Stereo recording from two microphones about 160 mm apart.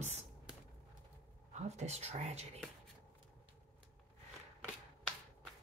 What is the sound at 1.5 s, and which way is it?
Speech, 45° right (ahead or behind).